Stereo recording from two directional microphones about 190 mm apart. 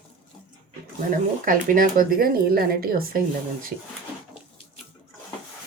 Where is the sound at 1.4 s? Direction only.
50° right (ahead or behind).